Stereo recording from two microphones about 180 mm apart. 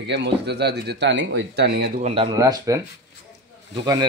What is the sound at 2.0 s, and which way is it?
Speech, 30° right (ahead or behind).